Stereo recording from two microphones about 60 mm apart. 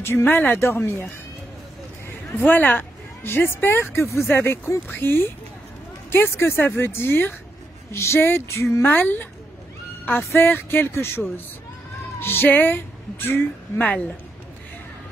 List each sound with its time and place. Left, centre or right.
0.0 s speech: left
0.6 s a sound: left
2.3 s speech: left
4.3 s speech: left
7.9 s a sound: left
8.8 s speech: left
10.3 s speech: left
13.8 s speech: left